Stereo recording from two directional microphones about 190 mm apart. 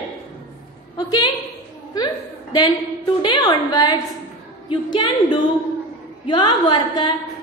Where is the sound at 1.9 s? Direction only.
20° left (ahead or behind).